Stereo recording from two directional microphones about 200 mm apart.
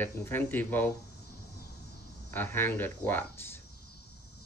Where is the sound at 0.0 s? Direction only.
10° left (ahead or behind).